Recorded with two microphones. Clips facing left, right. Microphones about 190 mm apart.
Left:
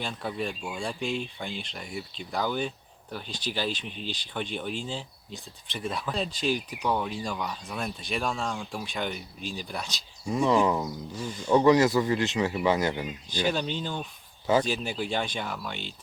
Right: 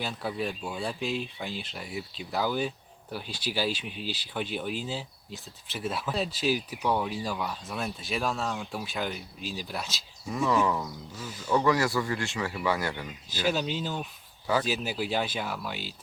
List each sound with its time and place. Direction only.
0.0 s speech: 5° right (ahead or behind)
10.2 s speech: 15° left (ahead or behind)
13.4 s speech: 5° right (ahead or behind)